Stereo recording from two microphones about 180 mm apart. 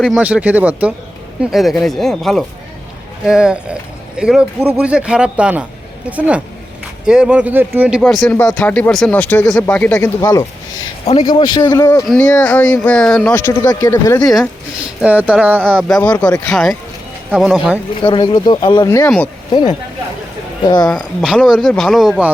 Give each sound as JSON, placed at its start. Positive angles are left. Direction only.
{"t": 0.0, "sound": "speech", "side_deg": -5}
{"t": 10.2, "sound": "speech", "side_deg": 20}
{"t": 11.0, "sound": "a man's voice", "side_deg": 35}
{"t": 11.3, "sound": "speech", "side_deg": 25}
{"t": 12.0, "sound": "speech", "side_deg": 5}
{"t": 14.2, "sound": "speech", "side_deg": 5}
{"t": 15.0, "sound": "speech", "side_deg": -10}
{"t": 16.0, "sound": "speech", "side_deg": 10}
{"t": 18.0, "sound": "speech", "side_deg": 25}
{"t": 20.8, "sound": "speech", "side_deg": 0}